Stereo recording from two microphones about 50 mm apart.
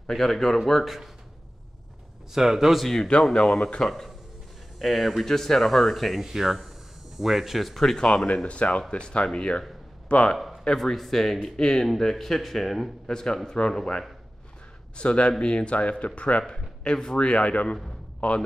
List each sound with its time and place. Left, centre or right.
0.1 s speech: centre
2.3 s speech: centre
3.3 s speech: centre
8.5 s speech: left
10.3 s speech: centre
13.0 s speech: centre